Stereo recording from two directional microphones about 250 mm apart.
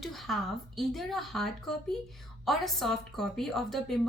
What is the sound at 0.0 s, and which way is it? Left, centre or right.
Speech, centre.